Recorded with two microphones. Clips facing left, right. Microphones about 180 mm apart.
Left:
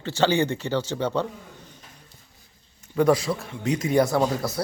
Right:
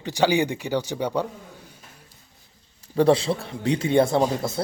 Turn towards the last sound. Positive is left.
turn(degrees=-25)  # may be behind; listen again after turning